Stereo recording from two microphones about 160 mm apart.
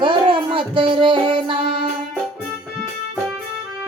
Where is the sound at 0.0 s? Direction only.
30° right (ahead or behind).